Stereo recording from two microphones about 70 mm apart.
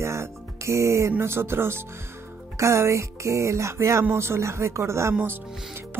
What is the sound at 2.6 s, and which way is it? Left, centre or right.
Music, right.